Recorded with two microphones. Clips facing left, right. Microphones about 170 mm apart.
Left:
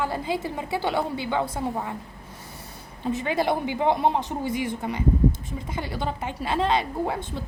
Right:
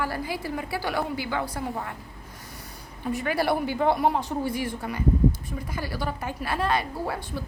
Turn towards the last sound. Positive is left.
turn(degrees=20)  # may be behind; listen again after turning